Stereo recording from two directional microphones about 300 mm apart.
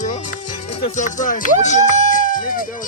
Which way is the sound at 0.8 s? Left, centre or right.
Left.